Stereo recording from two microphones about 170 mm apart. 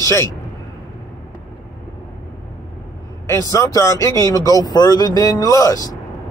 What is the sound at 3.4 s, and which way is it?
Speech, 20° left (ahead or behind).